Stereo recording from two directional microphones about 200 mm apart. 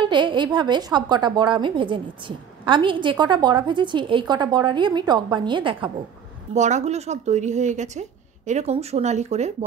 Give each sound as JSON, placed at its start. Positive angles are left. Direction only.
{"t": 0.0, "sound": "a woman's voice", "side_deg": -25}
{"t": 6.5, "sound": "a woman's voice", "side_deg": -35}